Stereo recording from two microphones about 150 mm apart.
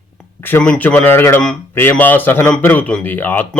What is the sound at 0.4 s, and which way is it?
A man's voice, 10° left (ahead or behind).